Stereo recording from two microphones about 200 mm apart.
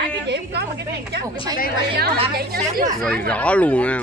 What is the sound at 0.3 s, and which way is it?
Speech, 55° right (ahead or behind).